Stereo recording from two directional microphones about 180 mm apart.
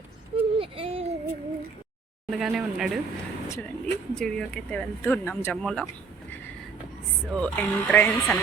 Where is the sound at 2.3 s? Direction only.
5° right (ahead or behind).